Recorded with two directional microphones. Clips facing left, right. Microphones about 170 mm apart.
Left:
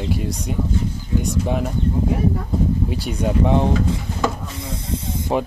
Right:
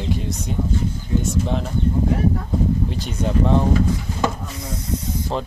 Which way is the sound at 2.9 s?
10° left (ahead or behind).